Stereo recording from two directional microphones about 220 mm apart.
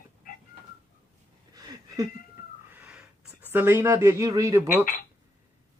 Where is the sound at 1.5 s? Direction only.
15° right (ahead or behind).